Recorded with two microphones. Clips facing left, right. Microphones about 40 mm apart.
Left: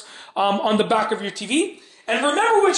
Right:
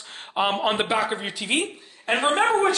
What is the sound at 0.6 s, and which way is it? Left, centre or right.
Speech, centre.